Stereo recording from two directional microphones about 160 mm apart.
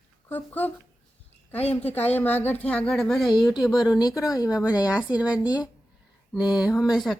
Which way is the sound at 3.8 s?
25° left (ahead or behind).